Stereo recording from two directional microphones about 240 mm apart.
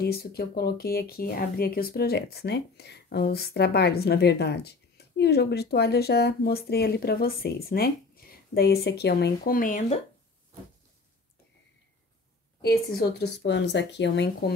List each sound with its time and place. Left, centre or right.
0.0 s speech: left
12.6 s speech: left